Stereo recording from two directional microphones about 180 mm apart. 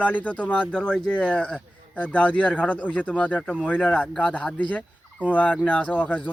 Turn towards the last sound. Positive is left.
turn(degrees=10)  # may be behind; listen again after turning